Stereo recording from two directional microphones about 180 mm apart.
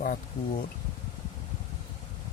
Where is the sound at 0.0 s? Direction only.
50° left (ahead or behind).